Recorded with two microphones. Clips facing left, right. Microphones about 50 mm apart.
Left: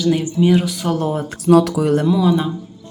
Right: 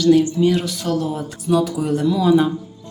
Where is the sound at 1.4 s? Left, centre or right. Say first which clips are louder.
Left 6 dB; left.